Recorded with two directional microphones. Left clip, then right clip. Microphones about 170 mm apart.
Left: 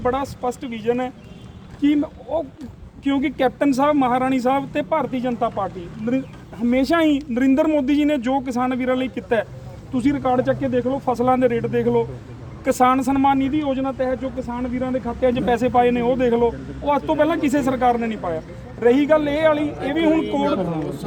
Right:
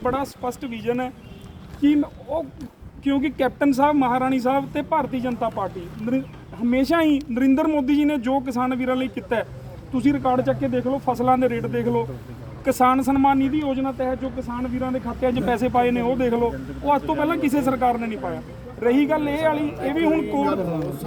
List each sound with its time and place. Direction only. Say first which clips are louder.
0.0 s speech: left 2 dB; 15° left (ahead or behind)
20.2 s speech: left 2 dB; centre (ahead or behind)